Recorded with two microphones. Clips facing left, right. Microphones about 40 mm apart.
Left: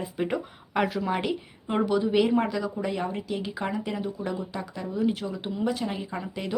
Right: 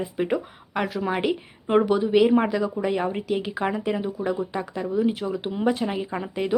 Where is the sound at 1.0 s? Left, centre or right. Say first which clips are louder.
Right 3 dB; centre.